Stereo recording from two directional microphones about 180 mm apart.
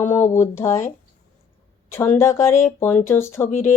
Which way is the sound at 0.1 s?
15° left (ahead or behind).